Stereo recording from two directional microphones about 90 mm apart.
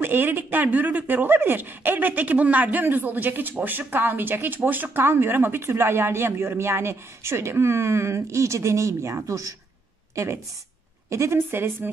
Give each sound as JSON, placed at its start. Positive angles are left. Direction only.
{"t": 0.0, "sound": "speech", "side_deg": -25}